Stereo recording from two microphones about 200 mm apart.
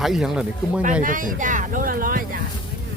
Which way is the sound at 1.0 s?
40° right (ahead or behind).